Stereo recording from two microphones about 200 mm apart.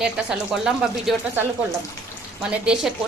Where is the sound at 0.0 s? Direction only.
5° right (ahead or behind).